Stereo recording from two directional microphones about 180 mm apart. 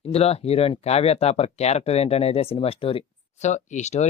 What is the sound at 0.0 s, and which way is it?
Speech, 35° left (ahead or behind).